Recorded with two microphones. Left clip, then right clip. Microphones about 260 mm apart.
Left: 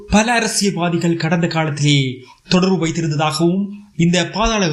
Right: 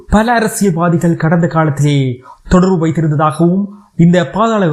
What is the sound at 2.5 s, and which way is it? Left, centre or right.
Speech, centre.